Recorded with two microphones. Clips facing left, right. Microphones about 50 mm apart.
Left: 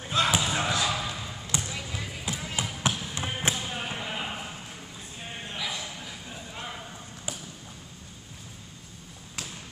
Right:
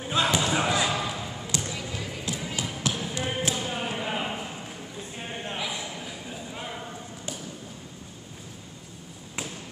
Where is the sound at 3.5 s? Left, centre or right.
Centre.